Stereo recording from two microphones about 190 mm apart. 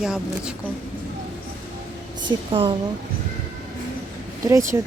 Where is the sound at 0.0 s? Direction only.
5° right (ahead or behind).